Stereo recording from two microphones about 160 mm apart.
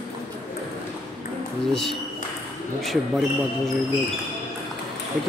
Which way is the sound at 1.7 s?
Centre (ahead or behind).